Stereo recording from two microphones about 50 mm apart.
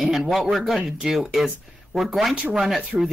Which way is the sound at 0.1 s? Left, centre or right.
Centre.